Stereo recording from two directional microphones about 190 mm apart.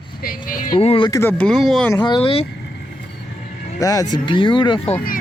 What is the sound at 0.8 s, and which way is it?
Speech, 30° left (ahead or behind).